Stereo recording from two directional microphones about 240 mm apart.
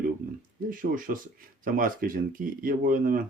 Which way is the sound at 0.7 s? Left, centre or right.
Right.